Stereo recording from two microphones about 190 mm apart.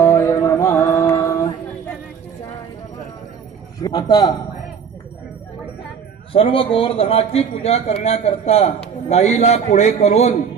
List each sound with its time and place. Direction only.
0.0 s music: 10° left (ahead or behind)
3.8 s a man's voice: 20° left (ahead or behind)
6.3 s speech: 30° left (ahead or behind)